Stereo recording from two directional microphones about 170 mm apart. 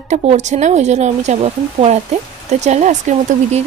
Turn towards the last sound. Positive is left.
turn(degrees=-45)  # may be behind; listen again after turning